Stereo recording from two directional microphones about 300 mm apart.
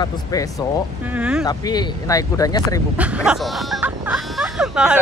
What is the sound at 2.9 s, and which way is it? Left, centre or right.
Speech, centre.